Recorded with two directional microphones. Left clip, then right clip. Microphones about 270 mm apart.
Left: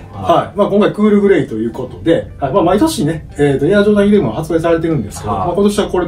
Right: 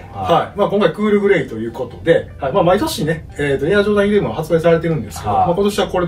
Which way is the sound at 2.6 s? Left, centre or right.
Centre.